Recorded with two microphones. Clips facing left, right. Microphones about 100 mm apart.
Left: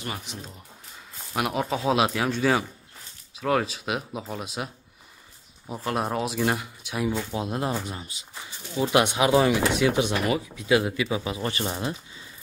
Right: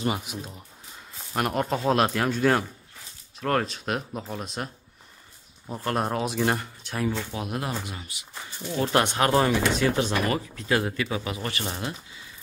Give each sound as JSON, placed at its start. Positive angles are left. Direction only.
{"t": 0.2, "sound": "speech", "side_deg": -5}
{"t": 5.7, "sound": "speech", "side_deg": 0}
{"t": 7.3, "sound": "speech", "side_deg": 25}
{"t": 8.7, "sound": "speech", "side_deg": 10}
{"t": 11.3, "sound": "speech", "side_deg": 25}